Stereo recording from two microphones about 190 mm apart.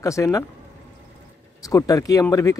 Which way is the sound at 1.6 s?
20° left (ahead or behind).